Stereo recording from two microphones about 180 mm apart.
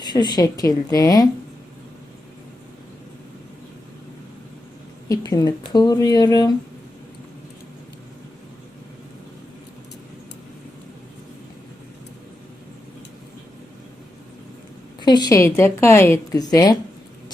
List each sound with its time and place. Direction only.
0.0 s speech: 25° left (ahead or behind)
5.0 s speech: 20° left (ahead or behind)
15.0 s a woman's voice: 25° left (ahead or behind)